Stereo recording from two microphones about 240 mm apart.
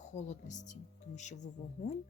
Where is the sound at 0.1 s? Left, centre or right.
Left.